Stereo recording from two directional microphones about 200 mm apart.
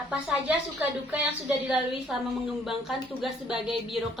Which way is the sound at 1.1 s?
Centre (ahead or behind).